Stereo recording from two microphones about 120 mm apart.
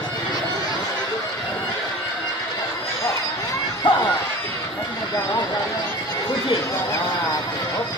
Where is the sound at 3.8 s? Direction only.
45° left (ahead or behind).